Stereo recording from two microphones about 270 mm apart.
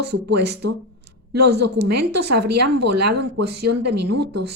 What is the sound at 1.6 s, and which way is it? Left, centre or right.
A woman's voice, right.